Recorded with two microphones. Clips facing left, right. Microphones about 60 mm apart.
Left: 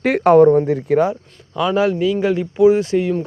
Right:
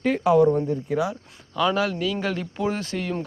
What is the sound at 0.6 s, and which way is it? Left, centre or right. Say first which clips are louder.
Speech: left 8 dB; left.